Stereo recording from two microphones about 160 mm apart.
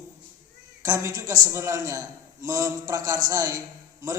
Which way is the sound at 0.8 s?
20° right (ahead or behind).